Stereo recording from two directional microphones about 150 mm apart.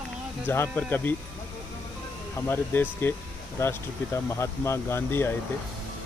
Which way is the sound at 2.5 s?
15° left (ahead or behind).